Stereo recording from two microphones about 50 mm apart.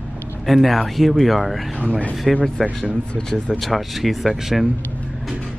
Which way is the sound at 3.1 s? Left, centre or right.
Centre.